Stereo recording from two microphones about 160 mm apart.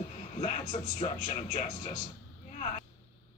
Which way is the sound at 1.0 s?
40° left (ahead or behind).